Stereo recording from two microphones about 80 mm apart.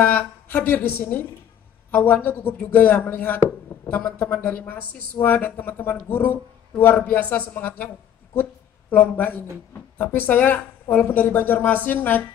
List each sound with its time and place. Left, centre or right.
0.0 s speech: left
8.9 s speech: left